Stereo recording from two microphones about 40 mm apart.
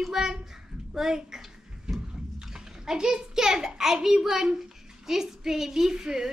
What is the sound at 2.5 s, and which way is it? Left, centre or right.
A child's voice, centre.